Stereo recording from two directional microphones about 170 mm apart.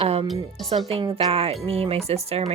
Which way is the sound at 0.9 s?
35° right (ahead or behind).